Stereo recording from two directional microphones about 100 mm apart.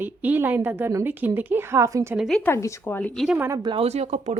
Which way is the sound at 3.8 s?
90° right.